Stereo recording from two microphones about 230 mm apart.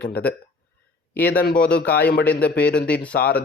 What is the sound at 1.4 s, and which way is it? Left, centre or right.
A man's voice, left.